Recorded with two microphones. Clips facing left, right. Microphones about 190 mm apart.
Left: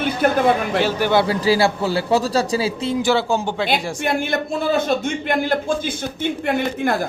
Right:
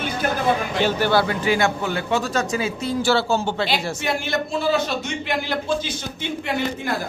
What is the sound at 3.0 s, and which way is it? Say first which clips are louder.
Speech: even; 15° left (ahead or behind).